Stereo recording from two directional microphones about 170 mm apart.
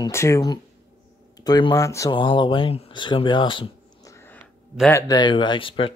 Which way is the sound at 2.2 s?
30° left (ahead or behind).